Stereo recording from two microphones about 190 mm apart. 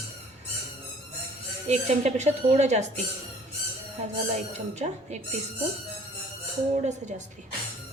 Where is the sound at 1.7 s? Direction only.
35° right (ahead or behind).